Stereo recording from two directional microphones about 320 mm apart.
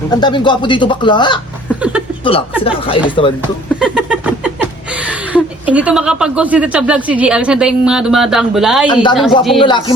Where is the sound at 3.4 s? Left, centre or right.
Centre.